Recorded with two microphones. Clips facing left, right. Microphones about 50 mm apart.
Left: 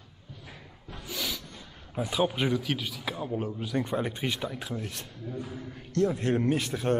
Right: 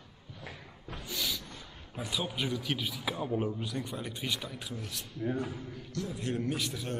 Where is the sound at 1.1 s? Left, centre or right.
Centre.